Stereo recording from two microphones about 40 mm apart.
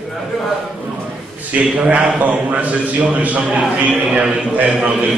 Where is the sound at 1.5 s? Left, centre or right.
Right.